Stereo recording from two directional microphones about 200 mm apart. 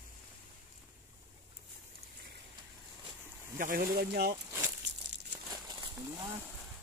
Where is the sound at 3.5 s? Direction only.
45° right (ahead or behind).